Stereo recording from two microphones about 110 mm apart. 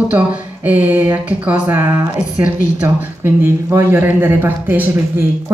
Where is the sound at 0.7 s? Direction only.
15° right (ahead or behind).